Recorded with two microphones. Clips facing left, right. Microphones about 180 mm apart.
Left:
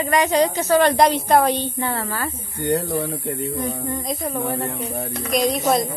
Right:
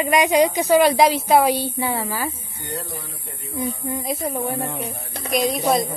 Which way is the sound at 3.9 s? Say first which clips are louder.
Even; 10° right (ahead or behind).